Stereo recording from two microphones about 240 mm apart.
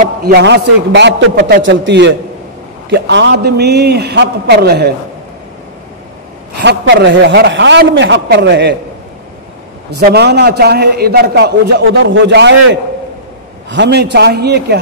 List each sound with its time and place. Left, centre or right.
0.2 s a man's voice: right
6.6 s a man's voice: right
9.8 s a man's voice: right
13.7 s a man's voice: right